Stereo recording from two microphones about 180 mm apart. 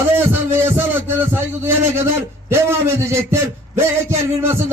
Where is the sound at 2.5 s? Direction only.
15° right (ahead or behind).